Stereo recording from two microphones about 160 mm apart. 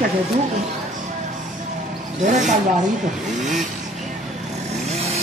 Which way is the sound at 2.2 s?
50° right (ahead or behind).